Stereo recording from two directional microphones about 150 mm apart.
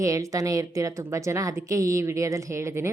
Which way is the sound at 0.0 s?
20° right (ahead or behind).